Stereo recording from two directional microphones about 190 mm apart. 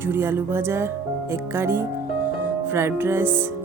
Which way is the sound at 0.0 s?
10° right (ahead or behind).